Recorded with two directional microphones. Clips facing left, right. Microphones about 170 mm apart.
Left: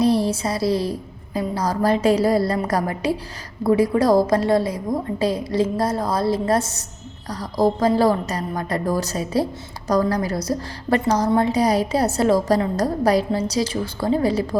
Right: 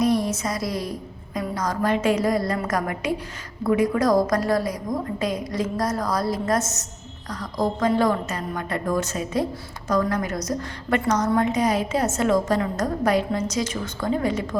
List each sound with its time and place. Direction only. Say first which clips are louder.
0.0 s a woman's voice: left 3 dB; 30° left (ahead or behind)